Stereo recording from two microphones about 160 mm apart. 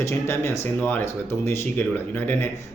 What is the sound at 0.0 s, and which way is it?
Speech, 15° left (ahead or behind).